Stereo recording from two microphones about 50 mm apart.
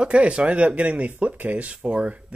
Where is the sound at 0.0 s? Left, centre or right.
Right.